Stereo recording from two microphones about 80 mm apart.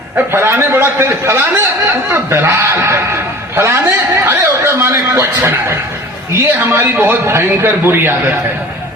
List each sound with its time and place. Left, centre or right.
0.3 s a man's voice: right